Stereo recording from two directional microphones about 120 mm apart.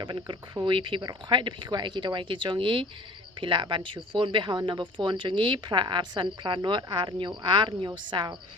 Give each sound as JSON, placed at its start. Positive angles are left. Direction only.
{"t": 0.0, "sound": "speech", "side_deg": -40}